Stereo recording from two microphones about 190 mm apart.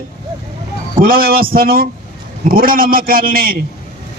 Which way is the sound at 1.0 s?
50° right (ahead or behind).